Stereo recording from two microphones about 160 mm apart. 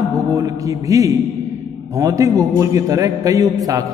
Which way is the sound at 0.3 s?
20° right (ahead or behind).